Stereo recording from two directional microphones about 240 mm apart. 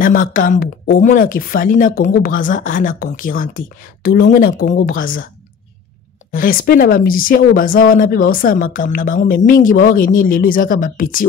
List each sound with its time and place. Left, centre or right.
0.0 s speech: left
6.3 s speech: left